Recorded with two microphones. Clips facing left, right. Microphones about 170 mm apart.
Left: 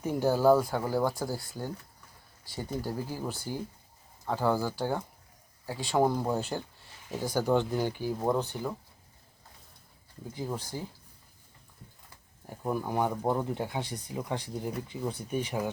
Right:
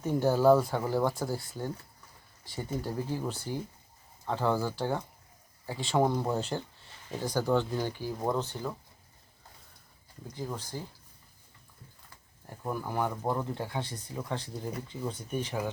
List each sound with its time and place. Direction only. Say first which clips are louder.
0.0 s speech: even; 5° left (ahead or behind)
10.2 s speech: left 2 dB; 10° left (ahead or behind)
12.5 s speech: left 3 dB; 15° left (ahead or behind)